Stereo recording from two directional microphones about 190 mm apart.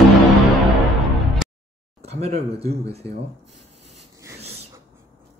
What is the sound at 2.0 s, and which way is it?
Speech, 35° right (ahead or behind).